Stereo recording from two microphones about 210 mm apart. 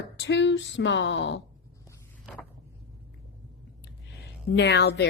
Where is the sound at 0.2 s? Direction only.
55° left (ahead or behind).